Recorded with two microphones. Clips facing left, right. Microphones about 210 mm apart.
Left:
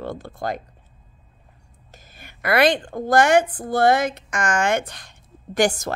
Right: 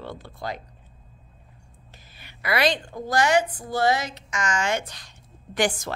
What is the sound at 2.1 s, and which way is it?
A woman's voice, 50° left (ahead or behind).